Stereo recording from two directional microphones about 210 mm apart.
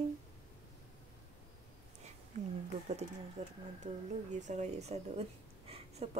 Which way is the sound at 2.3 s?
35° right (ahead or behind).